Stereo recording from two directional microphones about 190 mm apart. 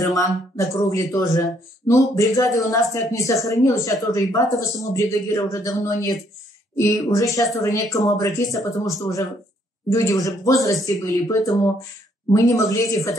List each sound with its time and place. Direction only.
0.0 s speech: 20° left (ahead or behind)